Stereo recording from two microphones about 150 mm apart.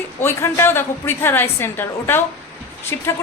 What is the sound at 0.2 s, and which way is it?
A woman's voice, 15° left (ahead or behind).